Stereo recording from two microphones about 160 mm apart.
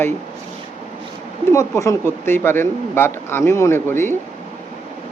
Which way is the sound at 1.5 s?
20° left (ahead or behind).